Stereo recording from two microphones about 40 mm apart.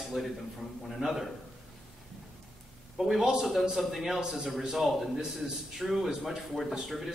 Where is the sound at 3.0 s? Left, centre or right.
Centre.